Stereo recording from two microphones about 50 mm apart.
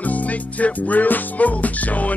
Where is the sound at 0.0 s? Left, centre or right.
Left.